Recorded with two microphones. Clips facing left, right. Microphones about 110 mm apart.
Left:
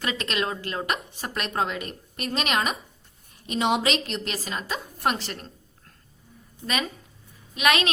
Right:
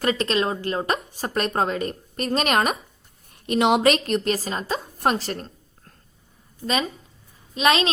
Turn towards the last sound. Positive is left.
turn(degrees=-30)  # may be behind; listen again after turning